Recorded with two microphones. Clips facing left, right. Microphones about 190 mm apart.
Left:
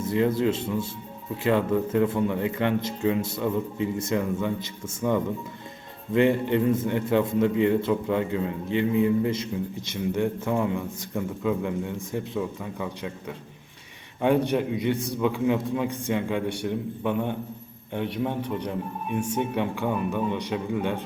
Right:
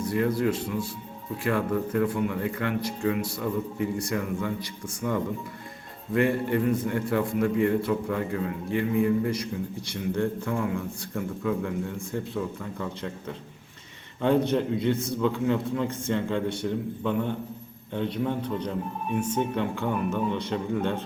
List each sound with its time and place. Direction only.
0.0 s a man's voice: 20° left (ahead or behind)